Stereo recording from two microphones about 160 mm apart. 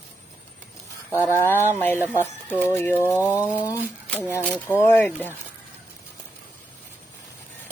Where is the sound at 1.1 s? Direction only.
15° left (ahead or behind).